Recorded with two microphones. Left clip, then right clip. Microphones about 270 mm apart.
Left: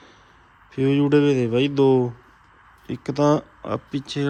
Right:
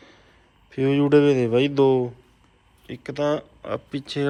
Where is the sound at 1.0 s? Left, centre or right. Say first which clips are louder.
Right 2 dB; centre.